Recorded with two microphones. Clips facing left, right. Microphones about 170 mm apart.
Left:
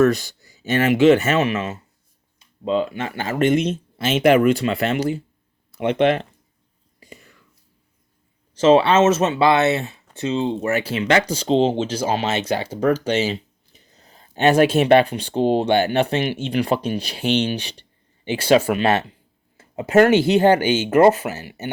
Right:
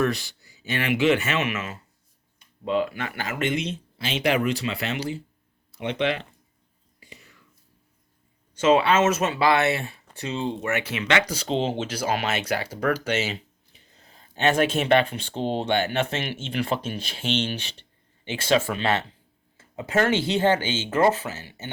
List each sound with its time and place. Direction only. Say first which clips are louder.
0.0 s speech: left 8 dB; 45° left (ahead or behind); by 3.3 s 30° left (ahead or behind)
3.3 s speech: left 10 dB; 45° left (ahead or behind)
7.0 s whispering: left 6 dB; 45° left (ahead or behind)
8.5 s speech: left 5 dB; 30° left (ahead or behind)
19.5 s a sound: left 7 dB; 20° left (ahead or behind)
20.1 s speech: left 7 dB; 15° left (ahead or behind)